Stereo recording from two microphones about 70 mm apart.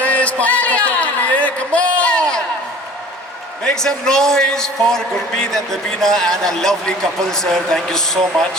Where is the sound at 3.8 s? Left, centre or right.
Centre.